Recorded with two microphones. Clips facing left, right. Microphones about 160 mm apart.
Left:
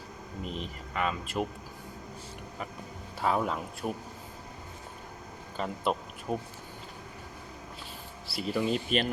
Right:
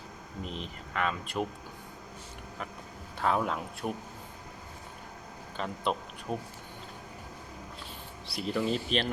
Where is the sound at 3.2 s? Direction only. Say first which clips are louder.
Even; 5° left (ahead or behind).